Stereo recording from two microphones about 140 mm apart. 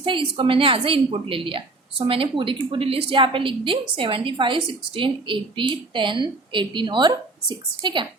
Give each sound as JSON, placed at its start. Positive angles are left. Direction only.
{"t": 0.0, "sound": "a woman's voice", "side_deg": -35}